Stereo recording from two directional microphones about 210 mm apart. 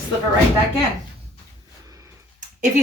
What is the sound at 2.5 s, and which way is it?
Speech, 35° right (ahead or behind).